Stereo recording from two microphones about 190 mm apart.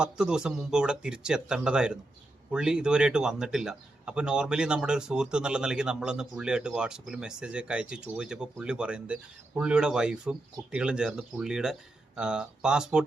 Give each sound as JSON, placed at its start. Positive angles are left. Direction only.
{"t": 0.0, "sound": "speech", "side_deg": -5}